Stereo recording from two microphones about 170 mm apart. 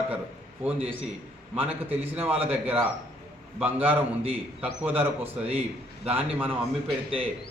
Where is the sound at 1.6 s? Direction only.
35° right (ahead or behind).